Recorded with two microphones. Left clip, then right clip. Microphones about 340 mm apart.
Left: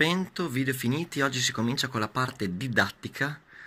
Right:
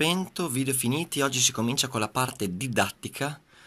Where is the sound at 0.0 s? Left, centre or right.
Centre.